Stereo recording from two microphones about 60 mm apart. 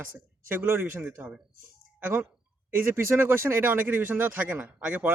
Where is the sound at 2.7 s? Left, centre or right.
Right.